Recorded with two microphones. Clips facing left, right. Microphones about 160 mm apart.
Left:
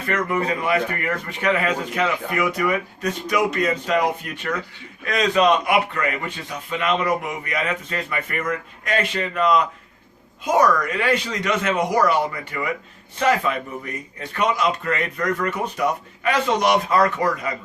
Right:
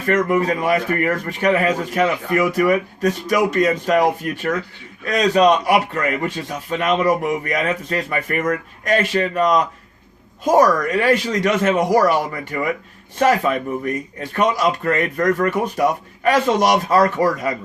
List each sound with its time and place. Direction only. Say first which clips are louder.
0.1 s a man's voice: right 6 dB; 45° right (ahead or behind)